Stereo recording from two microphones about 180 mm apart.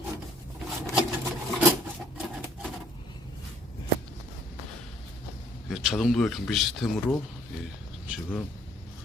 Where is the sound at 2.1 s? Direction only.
Centre (ahead or behind).